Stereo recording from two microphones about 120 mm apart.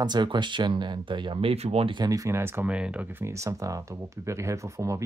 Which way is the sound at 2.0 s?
30° right (ahead or behind).